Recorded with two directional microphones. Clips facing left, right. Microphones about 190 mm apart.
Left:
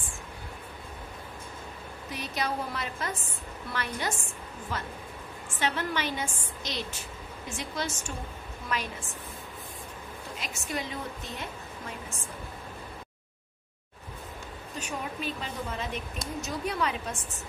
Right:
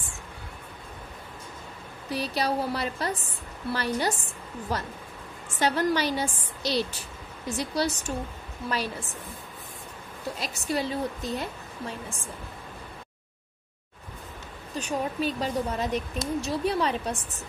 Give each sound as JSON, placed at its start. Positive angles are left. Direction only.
{"t": 2.0, "sound": "a woman's voice", "side_deg": -35}
{"t": 10.4, "sound": "a woman's voice", "side_deg": -35}
{"t": 14.8, "sound": "a woman's voice", "side_deg": -35}